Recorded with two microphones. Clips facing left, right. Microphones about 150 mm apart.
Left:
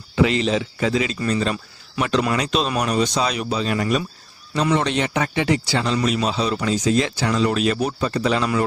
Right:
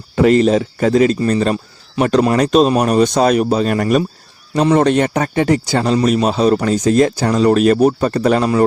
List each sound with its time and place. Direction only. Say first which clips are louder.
0.2 s speech: right 8 dB; 45° right (ahead or behind)